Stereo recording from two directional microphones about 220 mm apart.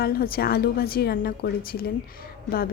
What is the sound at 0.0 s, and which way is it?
Speech, 45° left (ahead or behind).